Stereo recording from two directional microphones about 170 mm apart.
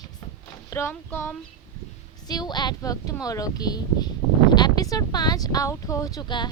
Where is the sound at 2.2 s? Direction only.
25° left (ahead or behind).